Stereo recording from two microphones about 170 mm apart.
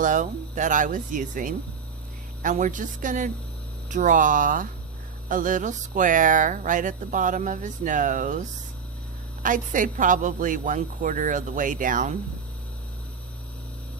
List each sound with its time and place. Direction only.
0.0 s speech: 50° right (ahead or behind)